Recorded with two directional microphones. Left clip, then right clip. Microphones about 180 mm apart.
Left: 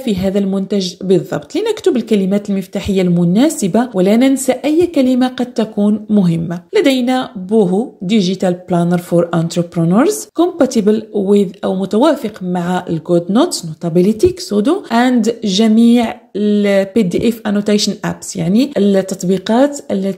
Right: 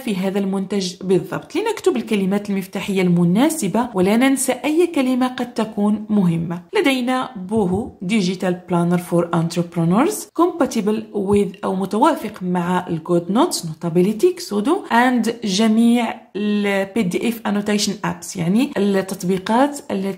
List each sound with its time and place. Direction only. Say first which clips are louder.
0.0 s a woman's voice: left 6 dB; 25° left (ahead or behind)